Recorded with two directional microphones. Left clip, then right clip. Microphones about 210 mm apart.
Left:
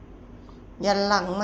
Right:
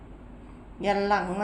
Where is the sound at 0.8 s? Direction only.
Centre (ahead or behind).